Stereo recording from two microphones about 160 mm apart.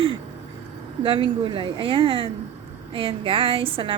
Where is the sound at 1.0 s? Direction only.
30° right (ahead or behind).